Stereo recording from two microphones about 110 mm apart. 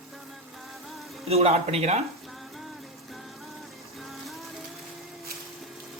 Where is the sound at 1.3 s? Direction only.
70° right (ahead or behind).